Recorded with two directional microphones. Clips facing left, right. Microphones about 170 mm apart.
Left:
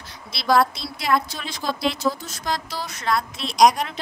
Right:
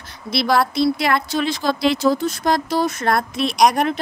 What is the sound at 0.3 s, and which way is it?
A woman's voice, 65° right (ahead or behind).